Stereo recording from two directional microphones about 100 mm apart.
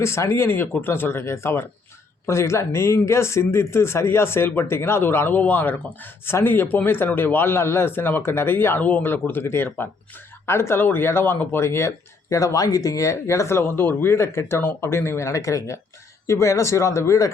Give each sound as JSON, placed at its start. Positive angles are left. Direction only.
{"t": 0.0, "sound": "speech", "side_deg": 25}